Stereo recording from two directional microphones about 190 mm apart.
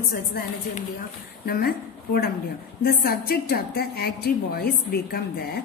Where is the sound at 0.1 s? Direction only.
55° left (ahead or behind).